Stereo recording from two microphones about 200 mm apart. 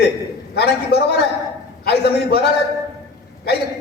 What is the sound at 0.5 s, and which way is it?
A man's voice, 55° left (ahead or behind).